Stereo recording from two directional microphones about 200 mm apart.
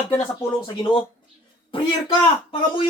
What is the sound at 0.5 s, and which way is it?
Speech, 25° left (ahead or behind).